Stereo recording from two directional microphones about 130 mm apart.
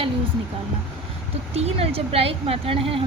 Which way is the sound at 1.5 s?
50° right (ahead or behind).